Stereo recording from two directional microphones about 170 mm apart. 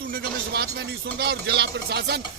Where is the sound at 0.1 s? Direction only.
65° right (ahead or behind).